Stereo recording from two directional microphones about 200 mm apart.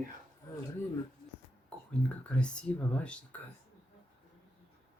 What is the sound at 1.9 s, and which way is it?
Speech, 5° left (ahead or behind).